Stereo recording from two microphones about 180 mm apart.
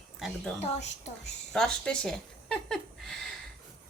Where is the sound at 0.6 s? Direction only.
40° left (ahead or behind).